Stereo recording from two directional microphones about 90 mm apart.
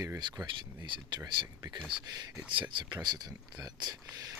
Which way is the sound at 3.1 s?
50° right (ahead or behind).